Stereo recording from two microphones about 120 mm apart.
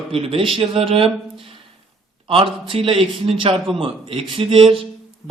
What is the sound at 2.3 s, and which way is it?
A man's voice, 50° right (ahead or behind).